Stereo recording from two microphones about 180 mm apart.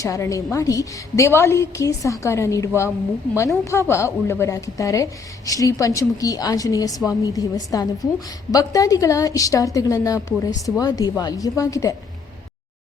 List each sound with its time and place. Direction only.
0.0 s a woman's voice: 15° left (ahead or behind)